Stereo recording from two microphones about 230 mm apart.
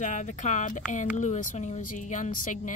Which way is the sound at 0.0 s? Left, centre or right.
Left.